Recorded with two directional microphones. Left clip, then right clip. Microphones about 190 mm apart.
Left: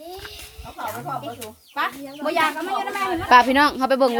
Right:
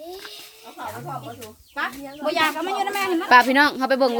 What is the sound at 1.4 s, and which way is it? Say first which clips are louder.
Speech: left 1 dB; 30° left (ahead or behind).